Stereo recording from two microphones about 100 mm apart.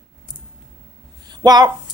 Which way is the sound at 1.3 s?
40° right (ahead or behind).